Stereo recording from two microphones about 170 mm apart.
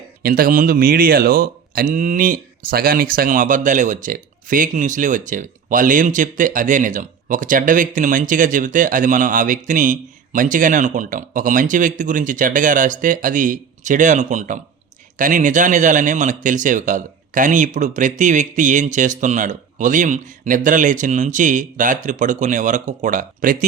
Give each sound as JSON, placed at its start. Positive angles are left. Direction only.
{"t": 0.2, "sound": "speech", "side_deg": -55}